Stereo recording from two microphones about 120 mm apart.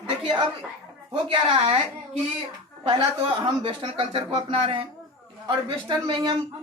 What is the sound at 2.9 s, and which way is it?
Speech, 40° right (ahead or behind).